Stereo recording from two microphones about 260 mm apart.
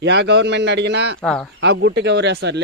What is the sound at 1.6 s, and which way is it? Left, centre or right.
Speech, right.